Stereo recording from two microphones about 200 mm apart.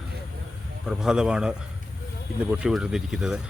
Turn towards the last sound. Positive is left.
turn(degrees=-5)  # may be behind; listen again after turning